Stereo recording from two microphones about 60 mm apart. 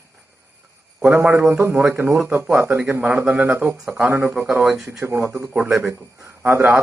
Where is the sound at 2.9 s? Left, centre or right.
Right.